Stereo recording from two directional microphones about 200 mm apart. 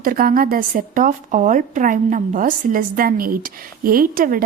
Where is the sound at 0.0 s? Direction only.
45° right (ahead or behind).